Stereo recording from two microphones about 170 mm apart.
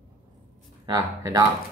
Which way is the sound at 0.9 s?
20° right (ahead or behind).